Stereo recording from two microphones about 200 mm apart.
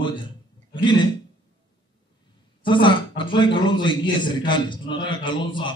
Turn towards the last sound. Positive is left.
turn(degrees=25)  # may be behind; listen again after turning